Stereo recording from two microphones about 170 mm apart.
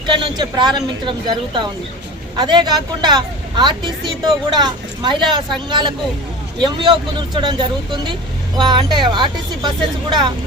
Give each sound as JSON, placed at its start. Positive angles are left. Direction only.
{"t": 0.1, "sound": "speech", "side_deg": -25}